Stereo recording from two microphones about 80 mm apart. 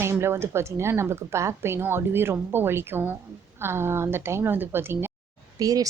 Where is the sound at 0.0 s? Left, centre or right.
Right.